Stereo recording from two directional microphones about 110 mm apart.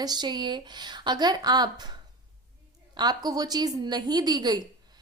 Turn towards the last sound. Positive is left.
turn(degrees=-35)  # may be behind; listen again after turning